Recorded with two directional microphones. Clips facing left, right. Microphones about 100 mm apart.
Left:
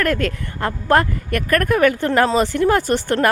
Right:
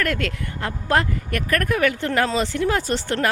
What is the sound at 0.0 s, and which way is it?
Speech, 40° left (ahead or behind).